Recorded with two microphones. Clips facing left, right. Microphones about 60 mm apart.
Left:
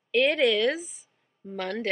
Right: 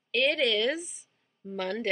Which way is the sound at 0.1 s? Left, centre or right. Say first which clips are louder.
Left 4 dB; centre.